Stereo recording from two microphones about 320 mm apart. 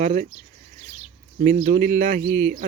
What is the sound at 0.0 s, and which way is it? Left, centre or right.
Speech, right.